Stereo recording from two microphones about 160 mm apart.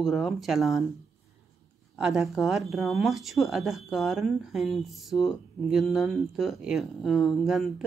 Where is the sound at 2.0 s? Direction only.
Centre (ahead or behind).